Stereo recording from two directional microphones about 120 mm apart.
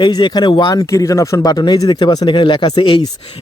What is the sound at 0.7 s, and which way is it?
Speech, 25° left (ahead or behind).